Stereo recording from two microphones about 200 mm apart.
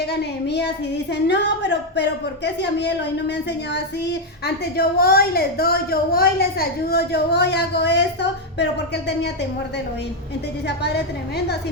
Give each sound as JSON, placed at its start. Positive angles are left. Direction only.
{"t": 0.1, "sound": "a woman's voice", "side_deg": 55}